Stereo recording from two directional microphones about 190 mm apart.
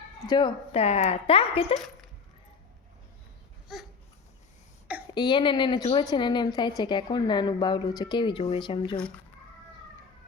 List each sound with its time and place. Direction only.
0.3 s speech: 25° left (ahead or behind)
5.1 s a woman's voice: 25° left (ahead or behind)